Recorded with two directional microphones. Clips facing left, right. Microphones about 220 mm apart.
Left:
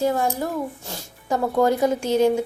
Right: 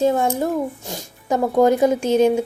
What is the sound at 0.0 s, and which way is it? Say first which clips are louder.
Speech: right 4 dB; 25° right (ahead or behind).